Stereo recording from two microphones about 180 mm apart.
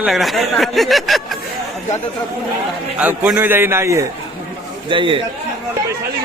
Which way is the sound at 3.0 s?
10° right (ahead or behind).